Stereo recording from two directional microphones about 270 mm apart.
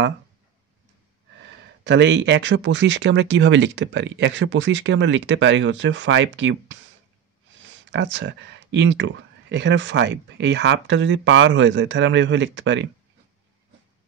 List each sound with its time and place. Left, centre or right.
1.5 s speech: right